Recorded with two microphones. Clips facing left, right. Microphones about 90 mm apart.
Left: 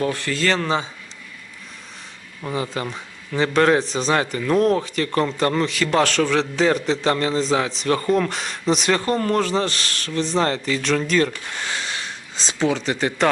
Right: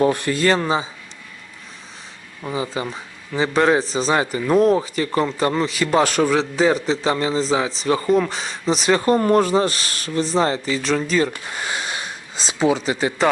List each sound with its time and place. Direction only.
0.0 s speech: 20° right (ahead or behind)
2.4 s speech: 5° right (ahead or behind)
4.1 s speech: 10° right (ahead or behind)
9.0 s speech: 25° right (ahead or behind)
9.4 s speech: 15° right (ahead or behind)
12.4 s speech: 10° right (ahead or behind)